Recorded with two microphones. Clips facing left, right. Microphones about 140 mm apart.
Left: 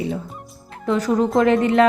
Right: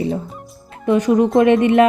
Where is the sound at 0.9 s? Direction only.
20° right (ahead or behind).